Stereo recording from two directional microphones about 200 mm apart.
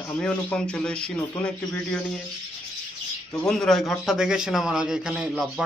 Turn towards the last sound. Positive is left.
turn(degrees=0)  # may be behind; listen again after turning